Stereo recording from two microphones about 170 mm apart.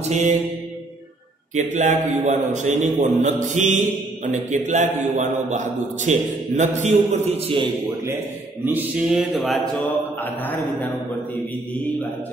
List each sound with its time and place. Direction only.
0.0 s mantra: 40° right (ahead or behind)
1.5 s a man's voice: 45° right (ahead or behind)
8.7 s a sound: 5° right (ahead or behind)
9.8 s mantra: 10° left (ahead or behind)